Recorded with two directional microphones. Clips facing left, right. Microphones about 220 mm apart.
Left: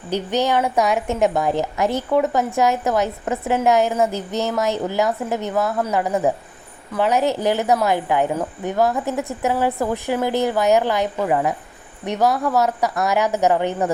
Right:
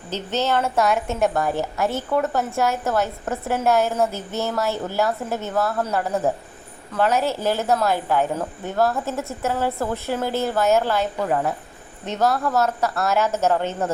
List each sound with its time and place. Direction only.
0.1 s a woman's voice: 15° left (ahead or behind)